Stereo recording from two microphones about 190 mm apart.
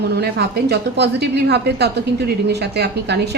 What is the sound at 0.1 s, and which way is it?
A woman's voice, 60° right (ahead or behind).